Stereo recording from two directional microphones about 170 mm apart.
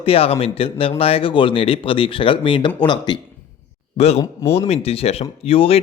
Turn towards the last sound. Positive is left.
turn(degrees=35)  # may be behind; listen again after turning